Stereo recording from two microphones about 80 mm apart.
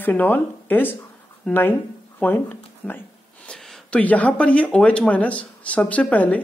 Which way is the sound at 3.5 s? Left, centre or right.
Centre.